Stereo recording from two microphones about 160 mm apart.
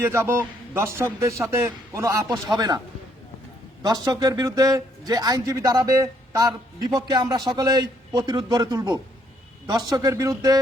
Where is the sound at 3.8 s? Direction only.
25° right (ahead or behind).